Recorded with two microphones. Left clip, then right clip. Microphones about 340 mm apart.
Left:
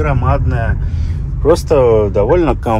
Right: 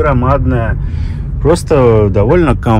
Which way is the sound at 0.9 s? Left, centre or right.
Right.